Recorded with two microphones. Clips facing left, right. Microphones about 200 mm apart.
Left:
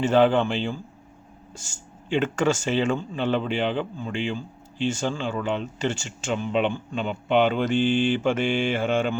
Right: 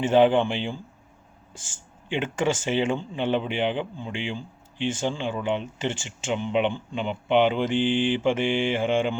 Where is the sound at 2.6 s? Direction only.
15° right (ahead or behind).